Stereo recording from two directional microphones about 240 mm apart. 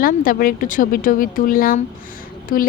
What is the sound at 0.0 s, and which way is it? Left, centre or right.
A woman's voice, left.